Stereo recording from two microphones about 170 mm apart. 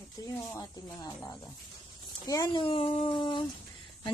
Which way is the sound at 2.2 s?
25° left (ahead or behind).